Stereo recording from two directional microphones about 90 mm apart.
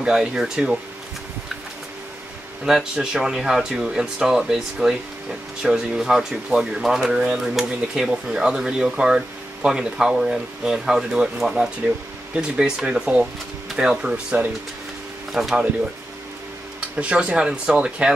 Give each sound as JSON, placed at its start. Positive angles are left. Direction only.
{"t": 0.0, "sound": "speech", "side_deg": -10}
{"t": 2.6, "sound": "speech", "side_deg": -5}
{"t": 16.9, "sound": "speech", "side_deg": -15}